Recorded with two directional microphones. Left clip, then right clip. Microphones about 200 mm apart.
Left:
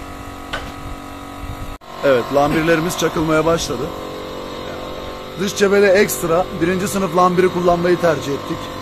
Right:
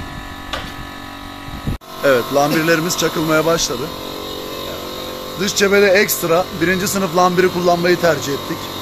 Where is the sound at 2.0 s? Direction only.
5° left (ahead or behind).